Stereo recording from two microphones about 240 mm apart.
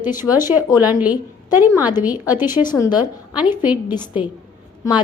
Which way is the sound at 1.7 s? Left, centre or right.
Centre.